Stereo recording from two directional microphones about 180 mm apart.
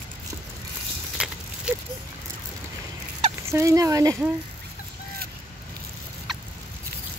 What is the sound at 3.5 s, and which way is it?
Speech, 15° right (ahead or behind).